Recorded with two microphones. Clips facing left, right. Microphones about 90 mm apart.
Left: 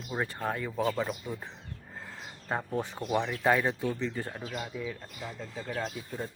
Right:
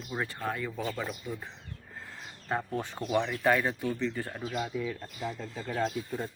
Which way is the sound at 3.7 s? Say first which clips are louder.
Even; 20° left (ahead or behind).